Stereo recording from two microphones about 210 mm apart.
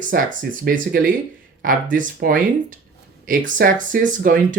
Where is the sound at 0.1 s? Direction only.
40° right (ahead or behind).